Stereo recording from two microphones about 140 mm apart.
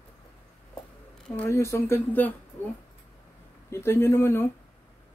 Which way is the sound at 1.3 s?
15° left (ahead or behind).